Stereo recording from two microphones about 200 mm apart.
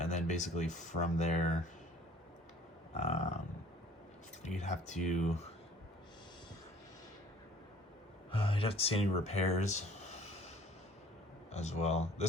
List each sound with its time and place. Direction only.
0.0 s speech: 35° left (ahead or behind)
2.9 s speech: 35° left (ahead or behind)
4.4 s speech: 35° left (ahead or behind)
8.3 s speech: 25° left (ahead or behind)
11.5 s speech: 35° left (ahead or behind)